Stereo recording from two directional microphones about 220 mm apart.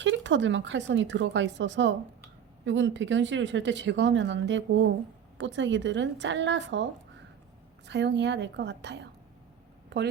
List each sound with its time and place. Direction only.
0.0 s speech: 55° right (ahead or behind)
7.9 s a woman's voice: 55° right (ahead or behind)